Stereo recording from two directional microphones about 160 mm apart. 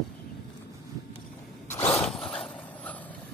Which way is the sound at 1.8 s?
40° left (ahead or behind).